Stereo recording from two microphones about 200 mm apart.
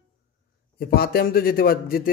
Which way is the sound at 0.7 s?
50° left (ahead or behind).